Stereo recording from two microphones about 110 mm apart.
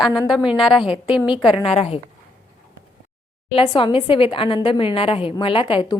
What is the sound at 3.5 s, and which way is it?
A woman's voice, 50° left (ahead or behind).